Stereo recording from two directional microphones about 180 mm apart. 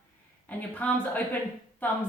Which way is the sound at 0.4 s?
10° left (ahead or behind).